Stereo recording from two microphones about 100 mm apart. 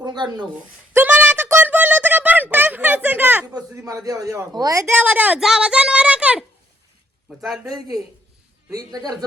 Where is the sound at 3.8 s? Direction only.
35° right (ahead or behind).